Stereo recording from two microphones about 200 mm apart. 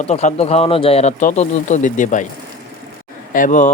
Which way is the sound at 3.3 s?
40° left (ahead or behind).